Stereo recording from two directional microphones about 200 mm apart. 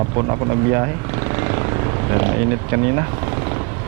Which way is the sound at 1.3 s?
15° right (ahead or behind).